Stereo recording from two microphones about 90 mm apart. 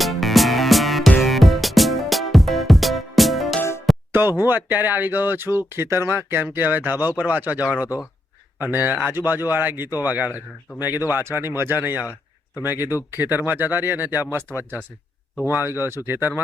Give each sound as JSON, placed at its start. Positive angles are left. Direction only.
{"t": 0.0, "sound": "music", "side_deg": 0}
{"t": 4.1, "sound": "speech", "side_deg": -25}